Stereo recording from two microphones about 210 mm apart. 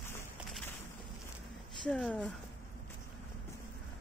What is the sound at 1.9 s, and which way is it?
Speech, 5° left (ahead or behind).